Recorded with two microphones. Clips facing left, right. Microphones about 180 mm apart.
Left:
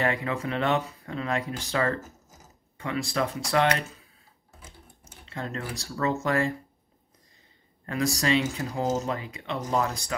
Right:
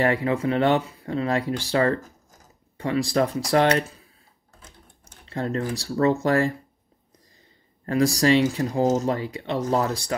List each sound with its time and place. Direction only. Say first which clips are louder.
0.0 s speech: right 6 dB; 30° right (ahead or behind)
2.0 s mechanisms: even; 5° left (ahead or behind)
2.8 s speech: right 6 dB; 35° right (ahead or behind)
4.6 s a sound: left 1 dB; 10° left (ahead or behind)
5.3 s speech: right 8 dB; 35° right (ahead or behind)
7.8 s speech: right 7 dB; 35° right (ahead or behind)